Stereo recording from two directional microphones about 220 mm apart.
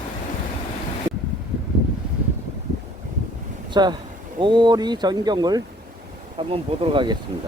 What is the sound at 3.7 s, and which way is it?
Speech, 20° right (ahead or behind).